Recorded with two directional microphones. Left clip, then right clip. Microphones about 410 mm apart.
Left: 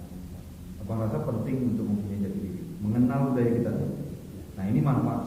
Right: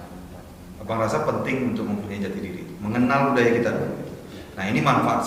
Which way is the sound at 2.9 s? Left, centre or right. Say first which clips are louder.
Right 7 dB; centre.